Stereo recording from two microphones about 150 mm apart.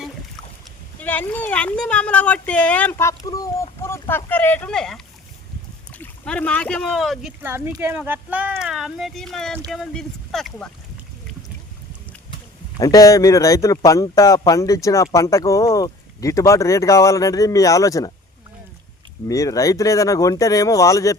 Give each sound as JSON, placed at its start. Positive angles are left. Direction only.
{"t": 1.0, "sound": "speech", "side_deg": 10}
{"t": 7.4, "sound": "speech", "side_deg": -15}
{"t": 12.8, "sound": "speech", "side_deg": 25}
{"t": 19.3, "sound": "speech", "side_deg": 20}